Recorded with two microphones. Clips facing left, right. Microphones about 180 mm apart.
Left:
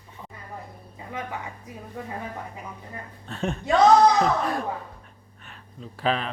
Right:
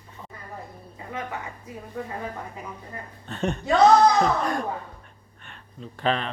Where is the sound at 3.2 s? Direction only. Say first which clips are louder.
Right 2 dB; centre (ahead or behind).